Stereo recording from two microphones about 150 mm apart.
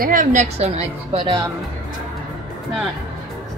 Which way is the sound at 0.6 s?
40° right (ahead or behind).